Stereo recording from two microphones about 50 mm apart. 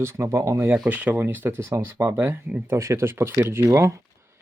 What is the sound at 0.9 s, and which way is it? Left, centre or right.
Speech, right.